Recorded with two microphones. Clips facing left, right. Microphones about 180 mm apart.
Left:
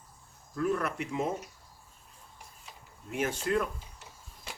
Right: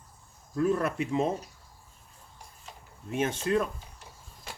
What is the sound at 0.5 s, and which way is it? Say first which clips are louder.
Speech: right 4 dB; 30° right (ahead or behind).